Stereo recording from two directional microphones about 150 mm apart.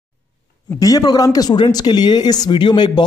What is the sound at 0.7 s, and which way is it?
A man's voice, 25° left (ahead or behind).